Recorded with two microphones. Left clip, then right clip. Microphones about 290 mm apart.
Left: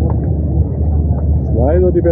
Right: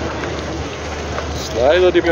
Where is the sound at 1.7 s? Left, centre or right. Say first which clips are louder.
Even; centre.